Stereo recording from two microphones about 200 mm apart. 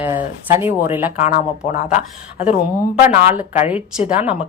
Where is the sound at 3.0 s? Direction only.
10° right (ahead or behind).